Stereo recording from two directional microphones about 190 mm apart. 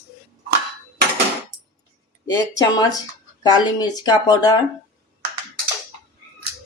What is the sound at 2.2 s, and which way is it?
Speech, 20° left (ahead or behind).